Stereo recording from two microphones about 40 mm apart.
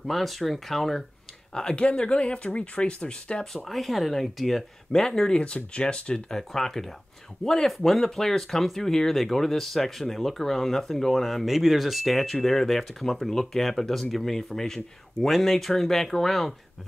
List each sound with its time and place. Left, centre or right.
0.0 s speech: centre
1.5 s speech: left
3.6 s speech: centre
5.4 s speech: left
6.3 s speech: centre
11.4 s speech: centre